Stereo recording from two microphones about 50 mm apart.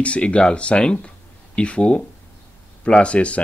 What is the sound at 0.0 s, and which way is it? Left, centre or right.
Speech, left.